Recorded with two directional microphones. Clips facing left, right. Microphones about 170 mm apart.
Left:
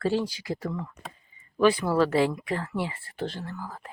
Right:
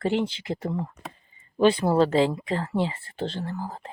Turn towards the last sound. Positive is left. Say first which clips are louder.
# right 5 dB
turn(degrees=-30)  # may be behind; listen again after turning